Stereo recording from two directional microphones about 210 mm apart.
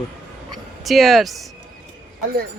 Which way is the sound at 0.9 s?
Centre (ahead or behind).